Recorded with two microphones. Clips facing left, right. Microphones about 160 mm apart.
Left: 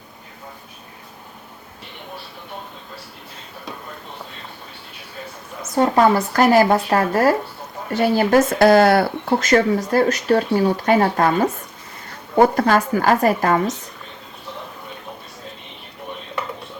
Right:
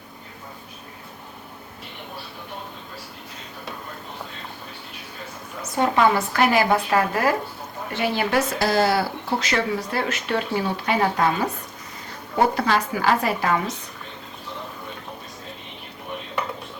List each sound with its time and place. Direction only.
5.7 s speech: 40° left (ahead or behind)
12.5 s speech: 45° left (ahead or behind)